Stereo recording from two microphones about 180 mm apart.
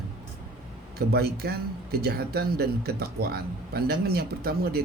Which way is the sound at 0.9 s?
60° right (ahead or behind).